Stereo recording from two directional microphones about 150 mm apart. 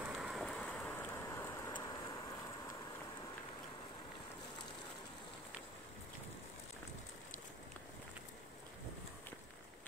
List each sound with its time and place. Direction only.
0.0 s vehicle: 5° right (ahead or behind); by 1.9 s 20° left (ahead or behind)